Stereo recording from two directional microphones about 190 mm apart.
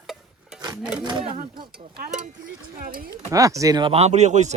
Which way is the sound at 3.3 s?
15° right (ahead or behind).